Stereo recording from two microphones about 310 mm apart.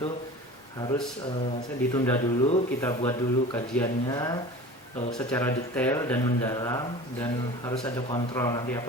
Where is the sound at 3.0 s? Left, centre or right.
Centre.